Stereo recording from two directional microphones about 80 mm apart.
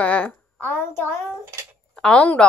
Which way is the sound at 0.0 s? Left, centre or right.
Centre.